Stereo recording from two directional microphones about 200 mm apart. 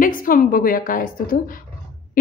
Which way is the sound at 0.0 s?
45° left (ahead or behind).